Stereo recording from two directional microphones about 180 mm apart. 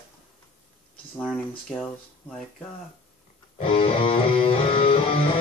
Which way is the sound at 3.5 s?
30° left (ahead or behind).